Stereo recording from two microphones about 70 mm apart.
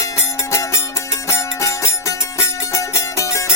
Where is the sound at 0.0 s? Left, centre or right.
Left.